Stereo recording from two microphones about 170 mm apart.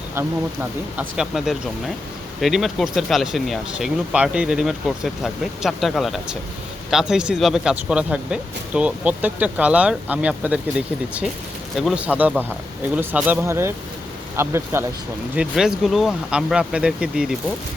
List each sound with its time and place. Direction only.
0.9 s speech: 5° right (ahead or behind)
15.4 s speech: 5° right (ahead or behind)